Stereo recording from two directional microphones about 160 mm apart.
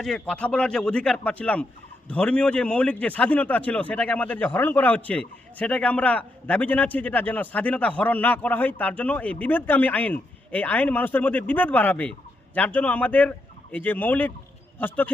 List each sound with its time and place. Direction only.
0.0 s a man's voice: 5° left (ahead or behind)